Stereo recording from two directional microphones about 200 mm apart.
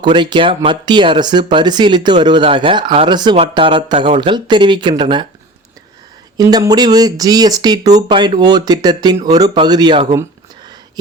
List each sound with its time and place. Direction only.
0.0 s speech: 20° right (ahead or behind)
6.3 s speech: 20° right (ahead or behind)